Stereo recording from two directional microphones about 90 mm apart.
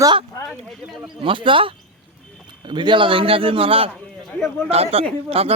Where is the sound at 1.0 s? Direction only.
70° right (ahead or behind).